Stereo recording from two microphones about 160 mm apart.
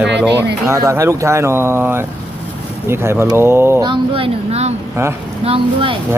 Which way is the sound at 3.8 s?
30° right (ahead or behind).